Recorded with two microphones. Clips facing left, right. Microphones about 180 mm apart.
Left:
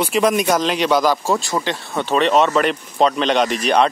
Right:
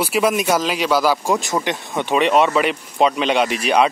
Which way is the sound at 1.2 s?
15° right (ahead or behind).